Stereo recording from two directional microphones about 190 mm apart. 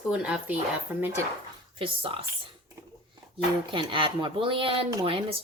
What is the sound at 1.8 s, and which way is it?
Speech, 30° right (ahead or behind).